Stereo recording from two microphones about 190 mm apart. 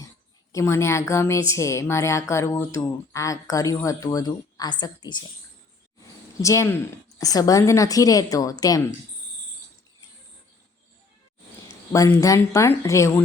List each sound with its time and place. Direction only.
0.5 s a woman's voice: 15° left (ahead or behind)
6.4 s a woman's voice: 15° left (ahead or behind)
11.9 s a woman's voice: 15° left (ahead or behind)